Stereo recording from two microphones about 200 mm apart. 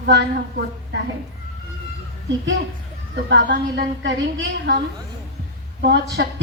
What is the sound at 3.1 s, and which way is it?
A woman's voice, 60° right (ahead or behind).